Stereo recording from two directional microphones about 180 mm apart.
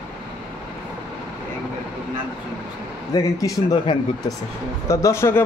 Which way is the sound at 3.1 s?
20° left (ahead or behind).